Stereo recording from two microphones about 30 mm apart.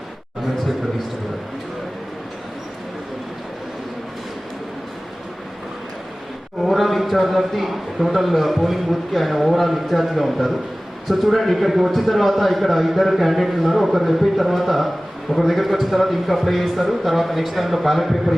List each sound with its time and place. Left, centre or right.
6.6 s a man's voice: centre